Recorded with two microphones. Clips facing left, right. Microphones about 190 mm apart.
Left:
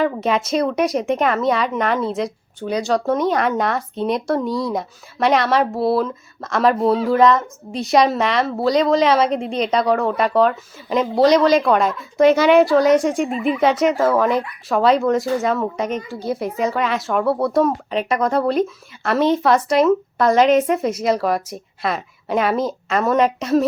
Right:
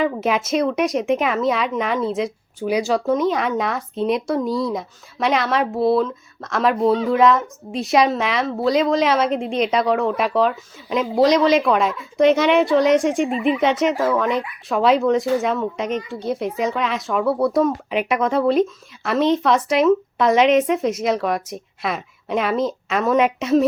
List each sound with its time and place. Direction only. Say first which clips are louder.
0.0 s speech: left 1 dB; centre (ahead or behind)